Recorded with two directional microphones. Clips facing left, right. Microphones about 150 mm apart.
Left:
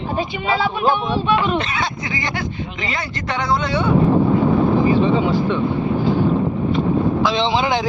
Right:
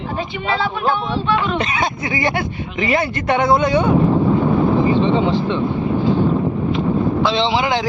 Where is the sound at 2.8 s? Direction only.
55° right (ahead or behind).